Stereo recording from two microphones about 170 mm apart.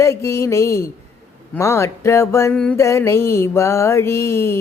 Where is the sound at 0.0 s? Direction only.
15° left (ahead or behind).